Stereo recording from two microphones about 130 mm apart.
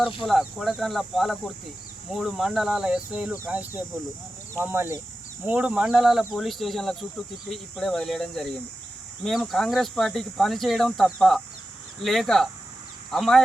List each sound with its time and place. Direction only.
0.3 s speech: centre (ahead or behind)